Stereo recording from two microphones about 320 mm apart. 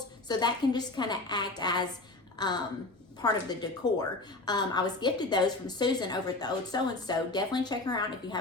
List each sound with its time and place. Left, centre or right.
0.3 s a woman's voice: centre